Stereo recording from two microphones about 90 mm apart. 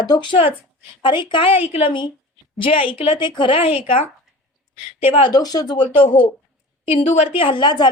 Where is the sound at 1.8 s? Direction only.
65° left (ahead or behind).